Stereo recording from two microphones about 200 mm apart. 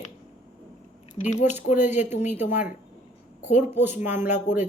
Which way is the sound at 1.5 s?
35° left (ahead or behind).